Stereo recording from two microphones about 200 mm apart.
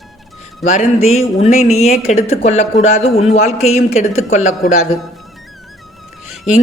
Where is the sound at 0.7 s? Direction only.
35° left (ahead or behind).